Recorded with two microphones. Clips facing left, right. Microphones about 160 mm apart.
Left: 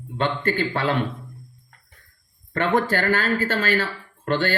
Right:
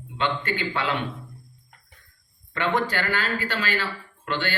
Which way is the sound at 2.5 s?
45° left (ahead or behind).